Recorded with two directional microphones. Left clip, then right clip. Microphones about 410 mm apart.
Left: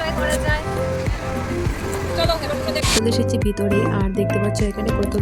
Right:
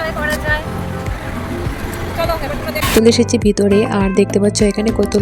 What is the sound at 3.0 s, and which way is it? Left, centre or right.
Speech, left.